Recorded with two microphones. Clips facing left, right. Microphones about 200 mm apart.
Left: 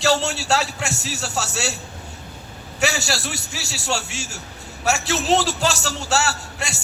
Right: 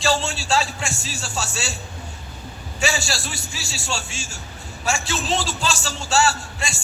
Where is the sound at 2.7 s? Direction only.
65° left (ahead or behind).